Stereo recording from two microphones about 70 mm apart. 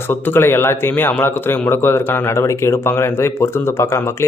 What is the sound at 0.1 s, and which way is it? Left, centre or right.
Speech, left.